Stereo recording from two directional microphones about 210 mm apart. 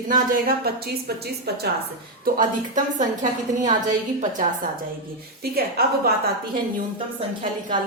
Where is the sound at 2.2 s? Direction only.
40° right (ahead or behind).